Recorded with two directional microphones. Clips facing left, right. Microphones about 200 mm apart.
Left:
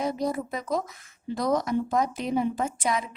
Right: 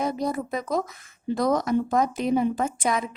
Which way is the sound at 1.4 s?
55° right (ahead or behind).